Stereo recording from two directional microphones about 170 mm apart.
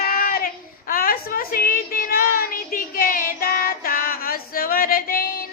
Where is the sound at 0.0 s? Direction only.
60° left (ahead or behind).